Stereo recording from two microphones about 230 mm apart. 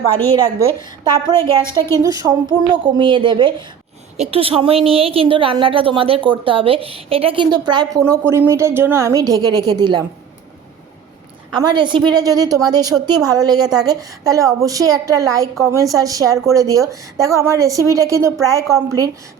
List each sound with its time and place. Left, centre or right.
0.9 s a woman's voice: centre
11.6 s a woman's voice: centre